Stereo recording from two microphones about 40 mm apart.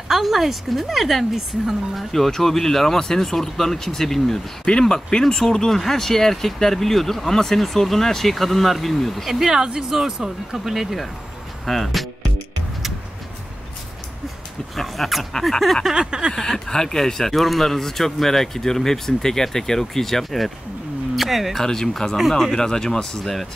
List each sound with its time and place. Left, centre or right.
0.1 s speech: centre
4.6 s speech: centre
14.8 s speech: centre
15.9 s speech: centre
16.3 s speech: centre
21.5 s speech: centre